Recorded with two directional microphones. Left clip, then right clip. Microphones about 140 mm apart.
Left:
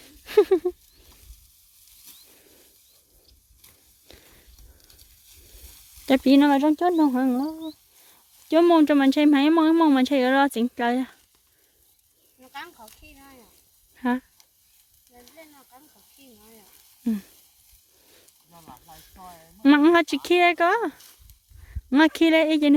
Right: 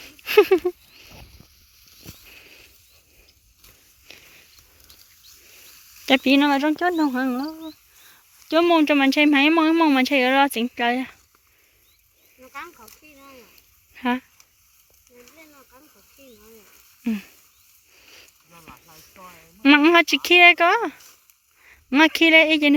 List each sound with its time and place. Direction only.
0.0 s a sound: 10° left (ahead or behind)
2.3 s a sound: 15° left (ahead or behind)
4.1 s walk: 40° left (ahead or behind)
6.2 s speech: 40° left (ahead or behind)
6.9 s speech: 30° left (ahead or behind)
12.5 s snake: 35° left (ahead or behind)
13.9 s speech: 20° left (ahead or behind)
17.0 s a sound: 20° left (ahead or behind)
21.6 s speech: 20° left (ahead or behind)